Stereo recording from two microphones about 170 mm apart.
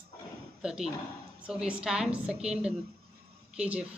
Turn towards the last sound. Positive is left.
turn(degrees=-5)  # may be behind; listen again after turning